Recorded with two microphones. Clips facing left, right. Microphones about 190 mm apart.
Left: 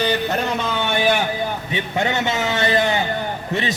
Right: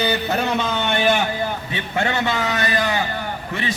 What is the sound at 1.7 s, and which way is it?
A man's voice, 15° left (ahead or behind).